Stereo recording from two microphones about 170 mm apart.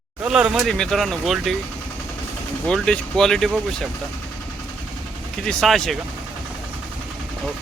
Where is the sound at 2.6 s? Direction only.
5° left (ahead or behind).